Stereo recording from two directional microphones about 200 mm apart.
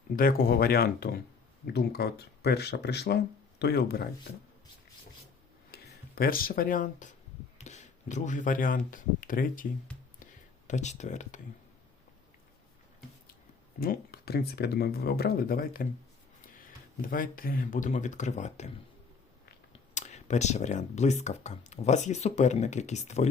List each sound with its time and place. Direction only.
0.2 s speech: 45° left (ahead or behind)
5.7 s speech: 50° left (ahead or behind)
10.7 s speech: 35° left (ahead or behind)
13.7 s speech: 50° left (ahead or behind)
17.0 s speech: 45° left (ahead or behind)
19.7 s speech: 35° left (ahead or behind)